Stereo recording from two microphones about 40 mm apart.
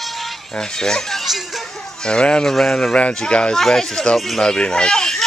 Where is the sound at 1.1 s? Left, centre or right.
Centre.